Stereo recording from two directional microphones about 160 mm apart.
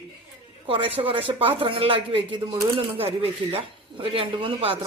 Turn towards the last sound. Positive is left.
turn(degrees=-35)  # may be behind; listen again after turning